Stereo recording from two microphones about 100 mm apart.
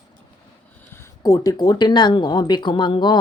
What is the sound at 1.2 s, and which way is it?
Speech, 35° left (ahead or behind).